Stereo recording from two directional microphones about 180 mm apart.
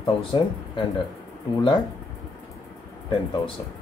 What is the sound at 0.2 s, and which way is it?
Speech, 30° left (ahead or behind).